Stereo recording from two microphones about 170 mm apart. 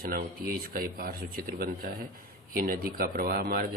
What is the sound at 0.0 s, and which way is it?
Speech, 60° right (ahead or behind).